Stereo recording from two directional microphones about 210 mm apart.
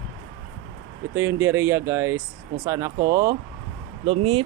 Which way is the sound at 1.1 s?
10° right (ahead or behind).